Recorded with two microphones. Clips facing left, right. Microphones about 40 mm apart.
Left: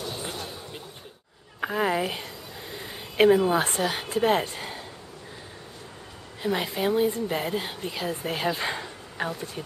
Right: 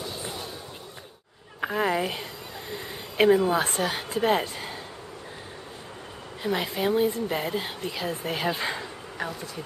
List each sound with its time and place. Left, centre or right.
0.1 s music: centre
1.6 s a woman's voice: centre
6.4 s speech: centre
9.2 s speech: left